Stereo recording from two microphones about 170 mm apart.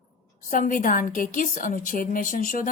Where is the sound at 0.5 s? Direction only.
50° left (ahead or behind).